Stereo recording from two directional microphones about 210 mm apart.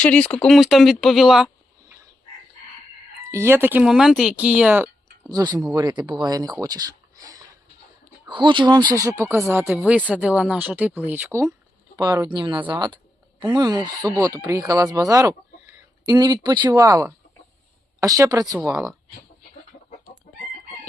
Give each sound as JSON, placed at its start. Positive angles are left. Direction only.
{"t": 0.0, "sound": "speech", "side_deg": 5}
{"t": 3.3, "sound": "speech", "side_deg": -10}
{"t": 5.6, "sound": "speech", "side_deg": -20}